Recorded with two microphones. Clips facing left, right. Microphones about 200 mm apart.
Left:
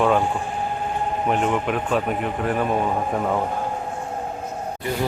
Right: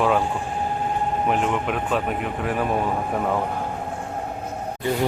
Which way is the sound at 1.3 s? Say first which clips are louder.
Left 3 dB; centre (ahead or behind).